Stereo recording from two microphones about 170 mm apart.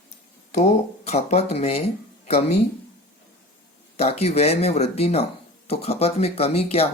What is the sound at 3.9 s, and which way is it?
Speech, 40° left (ahead or behind).